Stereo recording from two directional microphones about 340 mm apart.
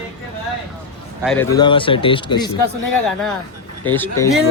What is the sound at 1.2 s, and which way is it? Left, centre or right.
Speech, centre.